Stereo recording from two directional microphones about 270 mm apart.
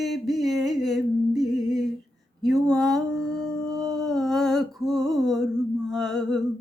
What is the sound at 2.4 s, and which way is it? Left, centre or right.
Mantra, centre.